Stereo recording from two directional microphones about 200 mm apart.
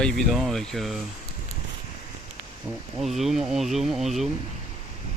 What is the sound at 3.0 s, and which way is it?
Speech, centre (ahead or behind).